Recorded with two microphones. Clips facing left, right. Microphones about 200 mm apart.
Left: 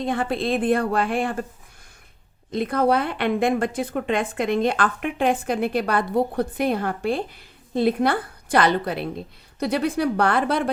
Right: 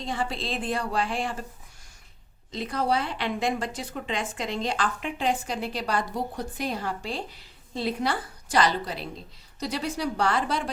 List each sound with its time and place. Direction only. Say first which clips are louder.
0.0 s a woman's voice: left 7 dB; 55° left (ahead or behind)
2.5 s a woman's voice: left 7 dB; 55° left (ahead or behind)